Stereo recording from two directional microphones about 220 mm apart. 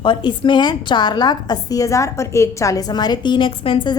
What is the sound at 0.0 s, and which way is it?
A woman's voice, 20° left (ahead or behind).